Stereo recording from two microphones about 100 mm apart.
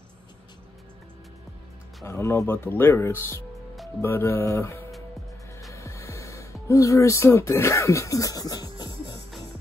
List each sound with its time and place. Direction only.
2.0 s speech: 25° left (ahead or behind)
5.7 s music: 30° left (ahead or behind)